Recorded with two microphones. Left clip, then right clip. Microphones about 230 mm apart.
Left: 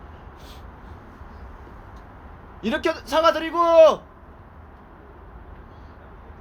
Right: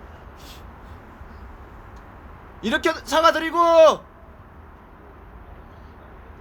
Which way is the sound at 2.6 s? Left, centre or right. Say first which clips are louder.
Right 2 dB; centre.